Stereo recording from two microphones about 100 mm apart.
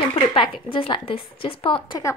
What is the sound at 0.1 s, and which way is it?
Speech, 60° left (ahead or behind).